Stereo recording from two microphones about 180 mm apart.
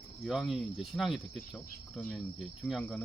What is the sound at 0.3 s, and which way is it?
Cricket, centre (ahead or behind).